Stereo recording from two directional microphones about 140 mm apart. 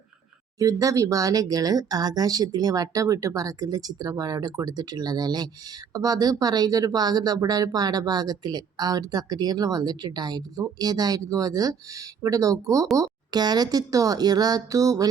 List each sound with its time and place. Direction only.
0.6 s speech: 25° right (ahead or behind)